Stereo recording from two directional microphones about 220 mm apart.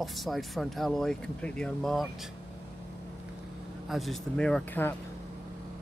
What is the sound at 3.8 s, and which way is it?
Speech, centre (ahead or behind).